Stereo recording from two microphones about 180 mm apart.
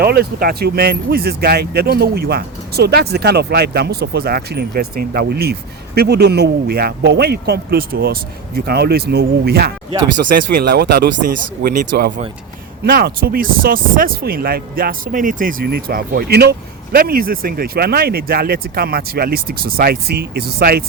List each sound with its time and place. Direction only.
0.0 s speech: 60° right (ahead or behind)